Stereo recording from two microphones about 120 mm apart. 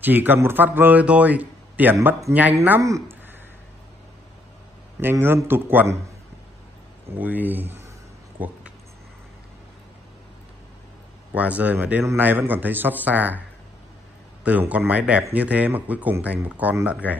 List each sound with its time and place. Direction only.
0.0 s speech: 15° right (ahead or behind)
2.8 s speech: 25° right (ahead or behind)
5.0 s speech: 20° right (ahead or behind)
7.2 s speech: 15° right (ahead or behind)
11.3 s speech: 10° right (ahead or behind)
14.4 s speech: 10° right (ahead or behind)